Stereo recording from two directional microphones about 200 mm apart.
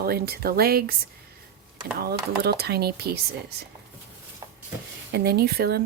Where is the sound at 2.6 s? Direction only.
50° right (ahead or behind).